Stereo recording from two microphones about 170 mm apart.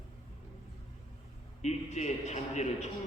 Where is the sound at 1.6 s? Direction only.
40° left (ahead or behind).